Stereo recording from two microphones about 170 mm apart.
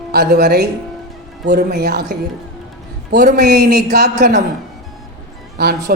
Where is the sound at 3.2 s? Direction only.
70° right (ahead or behind).